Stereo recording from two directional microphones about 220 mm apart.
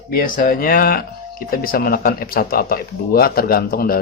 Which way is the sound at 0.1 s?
40° left (ahead or behind).